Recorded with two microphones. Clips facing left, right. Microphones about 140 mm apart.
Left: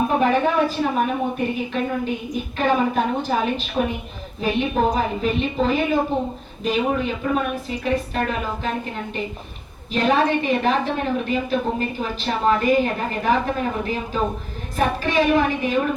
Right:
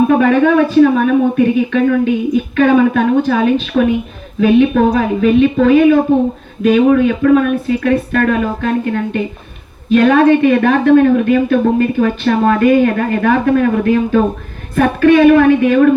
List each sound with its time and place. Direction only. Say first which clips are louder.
0.1 s a woman's voice: right 9 dB; 70° right (ahead or behind)
7.8 s a woman's voice: right 9 dB; 65° right (ahead or behind)